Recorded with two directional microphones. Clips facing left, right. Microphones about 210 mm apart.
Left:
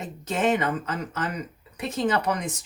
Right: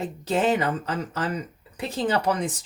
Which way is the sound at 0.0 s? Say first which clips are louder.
Right 2 dB; 35° right (ahead or behind).